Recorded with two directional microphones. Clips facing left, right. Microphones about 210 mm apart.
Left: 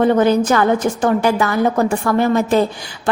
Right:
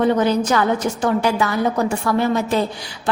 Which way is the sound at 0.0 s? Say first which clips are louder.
Left 3 dB; 50° left (ahead or behind).